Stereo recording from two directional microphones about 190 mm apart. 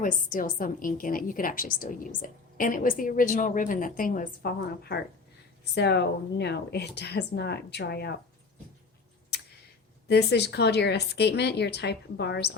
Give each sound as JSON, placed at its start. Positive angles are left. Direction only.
{"t": 0.0, "sound": "a woman's voice", "side_deg": 45}
{"t": 4.6, "sound": "speech", "side_deg": 60}
{"t": 10.1, "sound": "speech", "side_deg": 60}